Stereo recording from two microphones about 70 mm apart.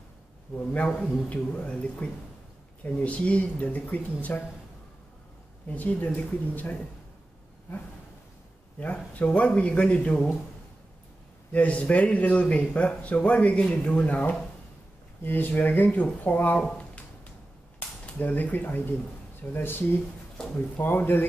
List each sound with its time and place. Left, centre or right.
0.6 s speech: centre
5.7 s speech: left
8.7 s speech: left
11.5 s speech: left
16.5 s a sound: centre
17.7 s speech: left